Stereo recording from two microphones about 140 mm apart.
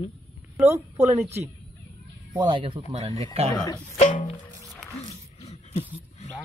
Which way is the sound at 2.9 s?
50° right (ahead or behind).